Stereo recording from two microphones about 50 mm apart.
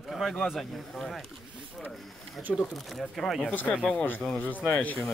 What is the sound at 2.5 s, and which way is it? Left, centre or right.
Speech, centre.